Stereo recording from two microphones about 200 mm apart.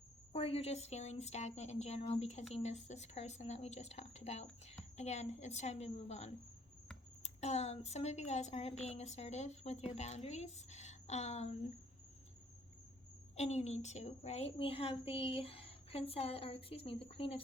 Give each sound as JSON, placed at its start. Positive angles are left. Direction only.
{"t": 0.3, "sound": "a woman's voice", "side_deg": 30}
{"t": 13.3, "sound": "a woman's voice", "side_deg": 35}